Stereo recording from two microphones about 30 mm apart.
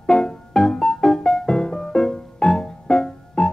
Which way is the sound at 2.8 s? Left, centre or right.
Left.